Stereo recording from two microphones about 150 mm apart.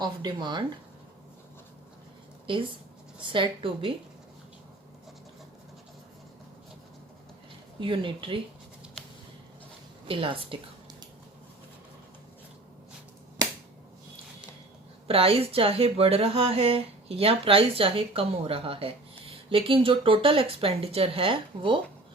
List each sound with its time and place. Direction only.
0.0 s speech: 30° right (ahead or behind)
3.2 s speech: 35° right (ahead or behind)
7.8 s speech: 35° right (ahead or behind)
10.1 s speech: 35° right (ahead or behind)
15.0 s speech: 40° right (ahead or behind)